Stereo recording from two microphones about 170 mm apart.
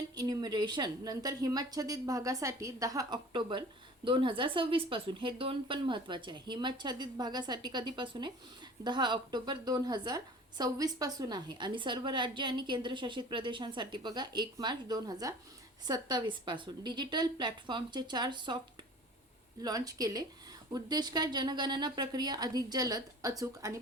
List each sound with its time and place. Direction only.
0.2 s a woman's voice: 25° right (ahead or behind)
19.6 s a woman's voice: 20° right (ahead or behind)